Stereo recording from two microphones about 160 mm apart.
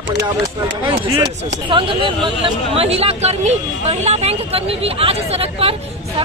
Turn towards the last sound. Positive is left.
turn(degrees=-35)  # may be behind; listen again after turning